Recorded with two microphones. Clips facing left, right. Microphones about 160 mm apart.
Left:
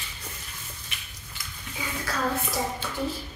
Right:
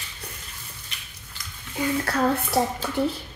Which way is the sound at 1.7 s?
65° right (ahead or behind).